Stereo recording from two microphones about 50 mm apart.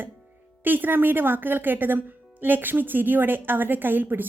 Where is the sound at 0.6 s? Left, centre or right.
Right.